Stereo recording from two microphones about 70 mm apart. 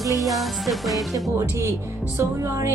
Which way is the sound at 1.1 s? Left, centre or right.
Right.